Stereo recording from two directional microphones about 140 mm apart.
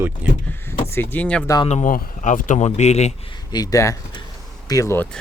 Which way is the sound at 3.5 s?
25° left (ahead or behind).